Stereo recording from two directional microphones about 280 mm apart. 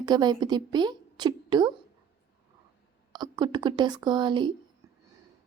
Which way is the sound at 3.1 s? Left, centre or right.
Centre.